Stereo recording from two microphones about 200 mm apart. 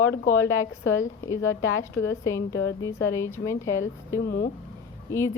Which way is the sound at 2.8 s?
15° left (ahead or behind).